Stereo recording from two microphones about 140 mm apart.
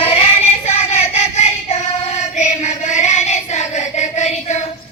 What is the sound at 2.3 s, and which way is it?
Child singing, 55° left (ahead or behind).